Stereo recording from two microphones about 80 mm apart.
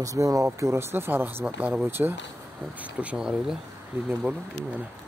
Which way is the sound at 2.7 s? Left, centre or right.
Centre.